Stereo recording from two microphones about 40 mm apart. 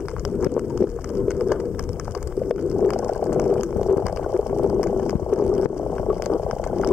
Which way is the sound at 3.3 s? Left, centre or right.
Right.